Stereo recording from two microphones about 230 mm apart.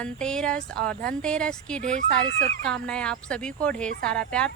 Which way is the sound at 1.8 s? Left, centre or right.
Right.